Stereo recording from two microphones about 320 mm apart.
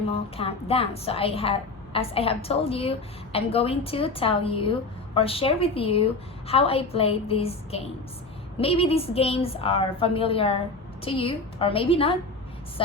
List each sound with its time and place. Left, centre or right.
0.1 s a woman's voice: centre